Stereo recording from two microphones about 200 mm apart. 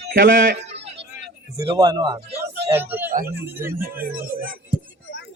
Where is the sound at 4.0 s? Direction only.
45° right (ahead or behind).